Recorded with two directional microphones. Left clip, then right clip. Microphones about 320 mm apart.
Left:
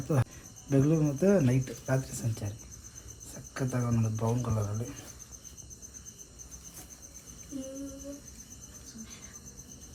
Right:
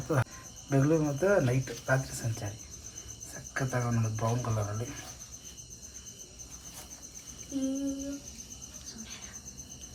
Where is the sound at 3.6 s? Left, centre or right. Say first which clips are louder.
Right 1 dB; left.